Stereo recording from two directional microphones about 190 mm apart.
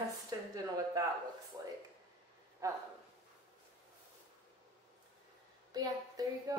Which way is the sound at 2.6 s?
15° right (ahead or behind).